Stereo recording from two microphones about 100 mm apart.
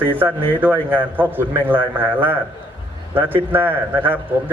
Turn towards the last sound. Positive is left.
turn(degrees=-20)  # may be behind; listen again after turning